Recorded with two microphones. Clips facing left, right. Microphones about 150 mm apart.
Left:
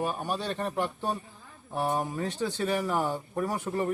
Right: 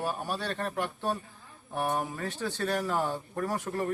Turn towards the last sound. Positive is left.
turn(degrees=10)  # may be behind; listen again after turning